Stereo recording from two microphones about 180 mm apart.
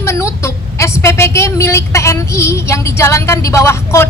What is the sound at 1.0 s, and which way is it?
A woman's voice, 15° left (ahead or behind).